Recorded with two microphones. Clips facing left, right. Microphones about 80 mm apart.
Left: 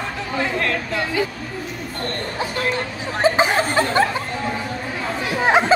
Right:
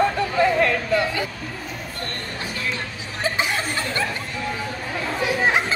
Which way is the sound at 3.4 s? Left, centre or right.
Left.